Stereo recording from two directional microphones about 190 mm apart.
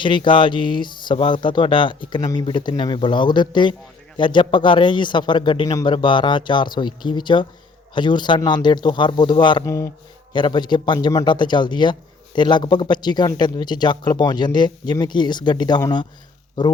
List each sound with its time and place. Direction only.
0.0 s speech: 25° left (ahead or behind)